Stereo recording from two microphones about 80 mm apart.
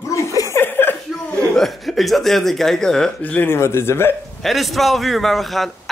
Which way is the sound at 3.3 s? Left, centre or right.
Left.